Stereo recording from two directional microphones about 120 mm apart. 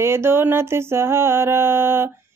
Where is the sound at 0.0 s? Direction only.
20° right (ahead or behind).